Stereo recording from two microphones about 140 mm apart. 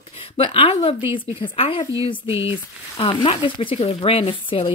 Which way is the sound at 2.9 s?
40° left (ahead or behind).